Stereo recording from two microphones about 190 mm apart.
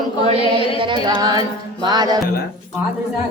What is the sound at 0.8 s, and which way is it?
Music, 25° right (ahead or behind).